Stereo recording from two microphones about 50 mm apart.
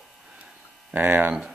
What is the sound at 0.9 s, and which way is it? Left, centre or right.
Speech, right.